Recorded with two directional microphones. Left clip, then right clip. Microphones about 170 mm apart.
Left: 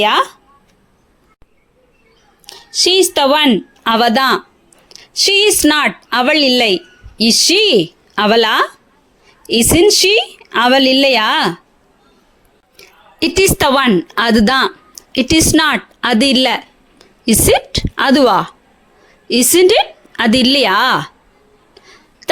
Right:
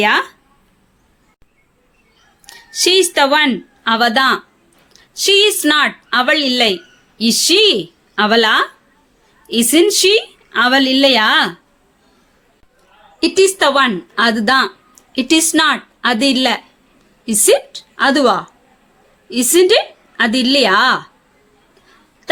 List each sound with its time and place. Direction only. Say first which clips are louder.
0.0 s a woman's voice: left 1 dB; 40° left (ahead or behind)
2.5 s a woman's voice: left 1 dB; 20° left (ahead or behind); by 11.5 s 45° left (ahead or behind)
13.1 s a woman's voice: even; 50° left (ahead or behind)